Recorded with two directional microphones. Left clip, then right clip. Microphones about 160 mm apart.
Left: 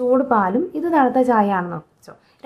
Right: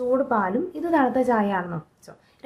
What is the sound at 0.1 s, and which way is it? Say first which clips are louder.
A woman's voice: left 5 dB; 30° left (ahead or behind).